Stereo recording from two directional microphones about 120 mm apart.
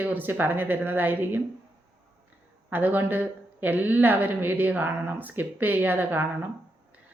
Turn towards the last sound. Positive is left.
turn(degrees=-15)  # may be behind; listen again after turning